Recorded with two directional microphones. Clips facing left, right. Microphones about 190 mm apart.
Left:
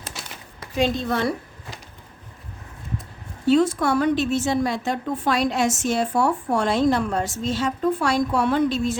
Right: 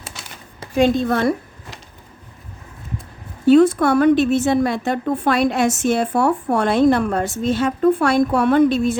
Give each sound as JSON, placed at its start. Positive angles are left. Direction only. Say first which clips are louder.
{"t": 0.8, "sound": "a woman's voice", "louder": "right 6 dB", "side_deg": -50}
{"t": 3.4, "sound": "a woman's voice", "louder": "right 6 dB", "side_deg": -55}